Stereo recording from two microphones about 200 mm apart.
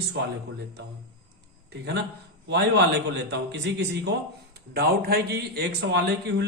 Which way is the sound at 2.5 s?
60° right (ahead or behind).